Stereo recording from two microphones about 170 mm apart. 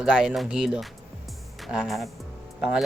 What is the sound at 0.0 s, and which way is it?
Speech, 5° right (ahead or behind).